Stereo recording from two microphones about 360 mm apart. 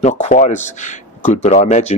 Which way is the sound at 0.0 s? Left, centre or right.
Centre.